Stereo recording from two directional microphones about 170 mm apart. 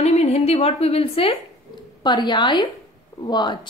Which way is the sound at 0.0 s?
40° left (ahead or behind).